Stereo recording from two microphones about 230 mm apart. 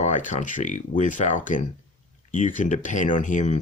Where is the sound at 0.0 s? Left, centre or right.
Left.